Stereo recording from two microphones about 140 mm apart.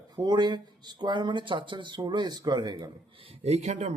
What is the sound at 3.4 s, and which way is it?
Speech, 50° right (ahead or behind).